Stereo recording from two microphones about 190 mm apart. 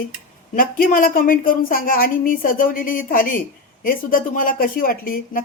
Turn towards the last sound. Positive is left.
turn(degrees=50)  # may be behind; listen again after turning